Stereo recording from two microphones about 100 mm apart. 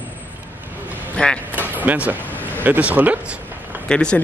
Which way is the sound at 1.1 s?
10° left (ahead or behind).